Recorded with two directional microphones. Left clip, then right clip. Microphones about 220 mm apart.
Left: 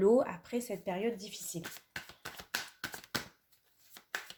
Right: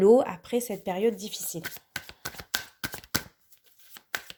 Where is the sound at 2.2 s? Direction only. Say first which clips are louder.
Right 6 dB; 30° right (ahead or behind).